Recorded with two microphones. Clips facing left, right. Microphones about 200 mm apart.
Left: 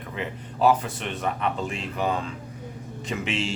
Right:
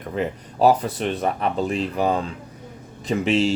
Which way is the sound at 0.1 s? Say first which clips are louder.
Right 8 dB; 40° right (ahead or behind).